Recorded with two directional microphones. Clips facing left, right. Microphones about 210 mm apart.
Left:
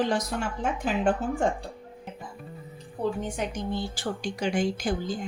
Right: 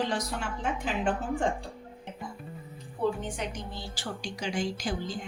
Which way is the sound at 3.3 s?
50° left (ahead or behind).